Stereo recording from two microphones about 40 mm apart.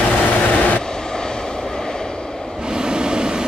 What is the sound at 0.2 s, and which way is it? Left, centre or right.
Vehicle, left.